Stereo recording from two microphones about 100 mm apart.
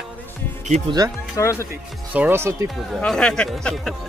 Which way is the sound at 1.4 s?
30° left (ahead or behind).